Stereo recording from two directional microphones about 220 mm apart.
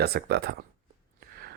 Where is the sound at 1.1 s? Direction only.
45° right (ahead or behind).